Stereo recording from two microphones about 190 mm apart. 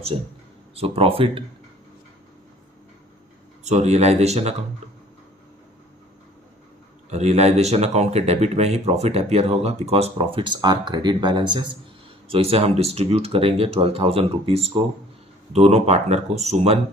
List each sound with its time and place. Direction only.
0.8 s speech: 30° right (ahead or behind)
3.6 s speech: 35° right (ahead or behind)
7.1 s speech: 35° right (ahead or behind)